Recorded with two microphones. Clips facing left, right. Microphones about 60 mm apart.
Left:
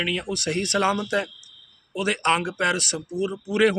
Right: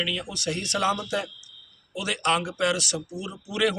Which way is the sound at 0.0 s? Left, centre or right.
Left.